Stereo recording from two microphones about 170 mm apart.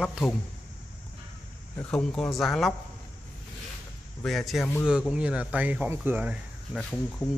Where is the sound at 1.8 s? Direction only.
5° left (ahead or behind).